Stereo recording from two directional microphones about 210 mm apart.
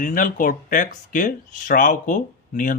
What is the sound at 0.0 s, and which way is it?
Speech, 40° left (ahead or behind).